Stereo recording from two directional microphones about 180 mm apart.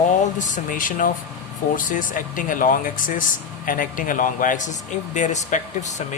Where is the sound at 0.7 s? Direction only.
50° left (ahead or behind).